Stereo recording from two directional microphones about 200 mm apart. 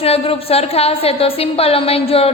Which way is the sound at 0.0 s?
30° left (ahead or behind).